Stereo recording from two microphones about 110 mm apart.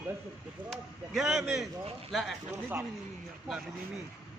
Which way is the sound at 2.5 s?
20° right (ahead or behind).